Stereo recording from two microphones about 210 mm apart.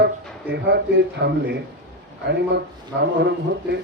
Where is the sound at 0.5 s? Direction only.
55° right (ahead or behind).